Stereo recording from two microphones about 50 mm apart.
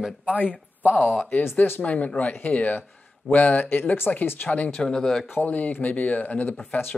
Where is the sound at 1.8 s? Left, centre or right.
Left.